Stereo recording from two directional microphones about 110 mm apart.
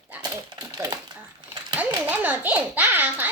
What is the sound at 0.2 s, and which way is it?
Typewriter, 40° right (ahead or behind).